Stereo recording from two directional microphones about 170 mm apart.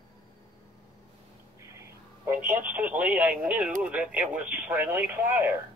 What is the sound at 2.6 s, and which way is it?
Speech, 10° right (ahead or behind).